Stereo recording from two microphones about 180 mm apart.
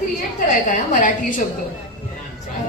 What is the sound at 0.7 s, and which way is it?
Speech, 50° left (ahead or behind).